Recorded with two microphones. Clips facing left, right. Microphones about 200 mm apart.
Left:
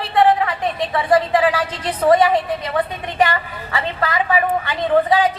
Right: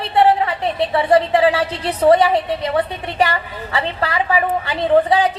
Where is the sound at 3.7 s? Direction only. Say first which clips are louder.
Right 1 dB; 30° right (ahead or behind).